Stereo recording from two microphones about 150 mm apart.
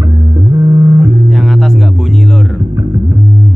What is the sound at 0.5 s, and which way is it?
Music, 30° right (ahead or behind).